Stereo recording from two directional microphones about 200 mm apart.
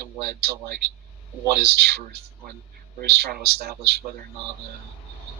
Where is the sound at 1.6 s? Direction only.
55° right (ahead or behind).